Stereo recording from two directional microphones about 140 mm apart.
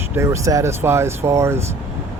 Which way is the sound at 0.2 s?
20° right (ahead or behind).